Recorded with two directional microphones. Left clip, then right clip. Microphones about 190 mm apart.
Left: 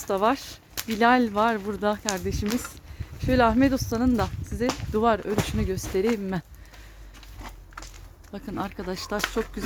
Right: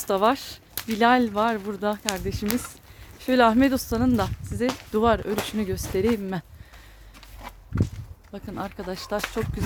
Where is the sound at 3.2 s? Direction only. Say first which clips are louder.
Right 2 dB; 15° right (ahead or behind).